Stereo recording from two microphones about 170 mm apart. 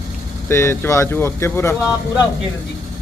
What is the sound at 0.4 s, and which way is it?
Speech, 15° left (ahead or behind).